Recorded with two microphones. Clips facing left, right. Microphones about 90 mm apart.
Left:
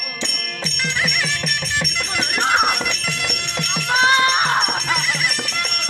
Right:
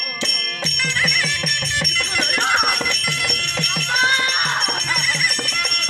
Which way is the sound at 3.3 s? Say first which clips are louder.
Even; 5° left (ahead or behind).